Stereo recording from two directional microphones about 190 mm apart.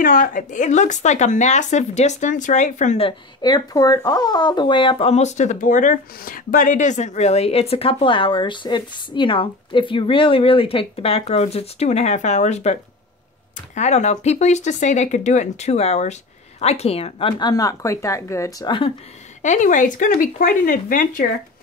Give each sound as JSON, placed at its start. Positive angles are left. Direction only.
{"t": 0.0, "sound": "speech", "side_deg": 45}
{"t": 3.1, "sound": "speech", "side_deg": 25}
{"t": 13.7, "sound": "speech", "side_deg": 35}
{"t": 19.4, "sound": "speech", "side_deg": 40}